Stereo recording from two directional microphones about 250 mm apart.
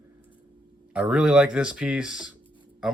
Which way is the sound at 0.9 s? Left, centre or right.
Centre.